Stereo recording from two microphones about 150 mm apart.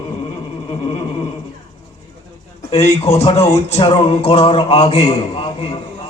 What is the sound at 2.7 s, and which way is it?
A man's voice, 45° left (ahead or behind).